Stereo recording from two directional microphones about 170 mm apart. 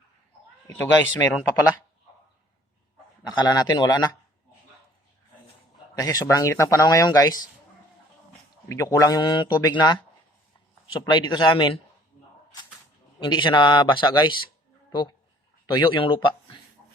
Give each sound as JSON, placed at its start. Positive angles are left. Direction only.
{"t": 0.7, "sound": "speech", "side_deg": 15}
{"t": 3.3, "sound": "speech", "side_deg": 25}
{"t": 5.9, "sound": "speech", "side_deg": 20}
{"t": 8.7, "sound": "speech", "side_deg": 20}
{"t": 11.0, "sound": "speech", "side_deg": 25}
{"t": 13.1, "sound": "speech", "side_deg": 25}
{"t": 15.6, "sound": "speech", "side_deg": 30}